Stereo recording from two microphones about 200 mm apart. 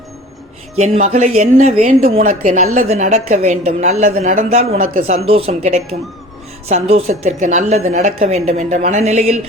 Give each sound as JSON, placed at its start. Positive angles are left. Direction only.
{"t": 0.8, "sound": "a woman's voice", "side_deg": -35}
{"t": 7.9, "sound": "a woman's voice", "side_deg": -45}
{"t": 8.2, "sound": "a woman's voice", "side_deg": -30}